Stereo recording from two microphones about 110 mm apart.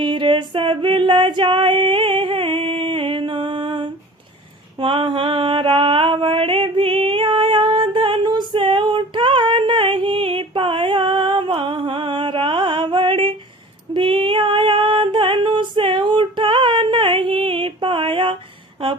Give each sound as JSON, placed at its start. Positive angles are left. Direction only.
{"t": 0.0, "sound": "female singing", "side_deg": -45}
{"t": 4.8, "sound": "mantra", "side_deg": -50}
{"t": 13.9, "sound": "female singing", "side_deg": -50}